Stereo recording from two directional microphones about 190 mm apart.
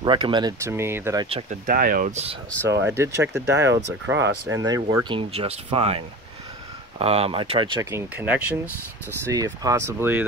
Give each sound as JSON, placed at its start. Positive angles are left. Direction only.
{"t": 0.0, "sound": "speech", "side_deg": -25}
{"t": 1.2, "sound": "speech", "side_deg": -30}
{"t": 1.7, "sound": "speech", "side_deg": -50}
{"t": 2.7, "sound": "speech", "side_deg": -15}
{"t": 7.9, "sound": "speech", "side_deg": -10}